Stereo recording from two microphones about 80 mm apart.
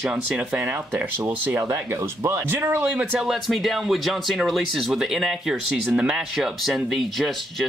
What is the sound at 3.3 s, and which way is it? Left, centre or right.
Speech, centre.